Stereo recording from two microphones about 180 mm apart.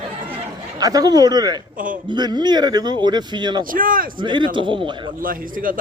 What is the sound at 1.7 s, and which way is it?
Speech, 50° right (ahead or behind).